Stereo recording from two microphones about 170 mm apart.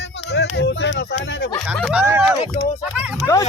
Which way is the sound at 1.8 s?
10° right (ahead or behind).